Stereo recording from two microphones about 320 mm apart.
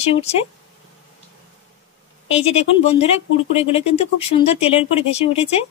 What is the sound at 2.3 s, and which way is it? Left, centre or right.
Speech, centre.